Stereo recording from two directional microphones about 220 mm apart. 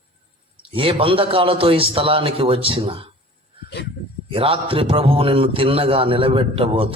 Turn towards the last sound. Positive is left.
turn(degrees=-25)  # may be behind; listen again after turning